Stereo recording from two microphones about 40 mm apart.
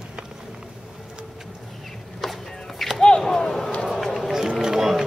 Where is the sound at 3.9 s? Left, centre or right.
Centre.